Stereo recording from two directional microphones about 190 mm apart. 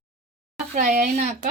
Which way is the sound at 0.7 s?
40° right (ahead or behind).